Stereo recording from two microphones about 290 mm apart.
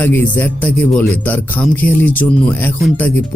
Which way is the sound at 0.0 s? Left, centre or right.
Centre.